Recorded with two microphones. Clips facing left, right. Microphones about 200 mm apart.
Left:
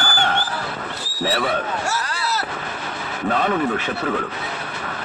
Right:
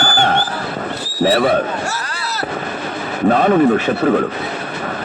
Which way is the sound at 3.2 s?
45° right (ahead or behind).